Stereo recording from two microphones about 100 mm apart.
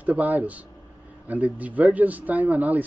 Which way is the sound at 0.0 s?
15° right (ahead or behind).